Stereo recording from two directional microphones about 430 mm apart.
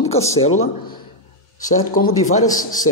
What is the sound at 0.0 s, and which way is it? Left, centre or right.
Speech, centre.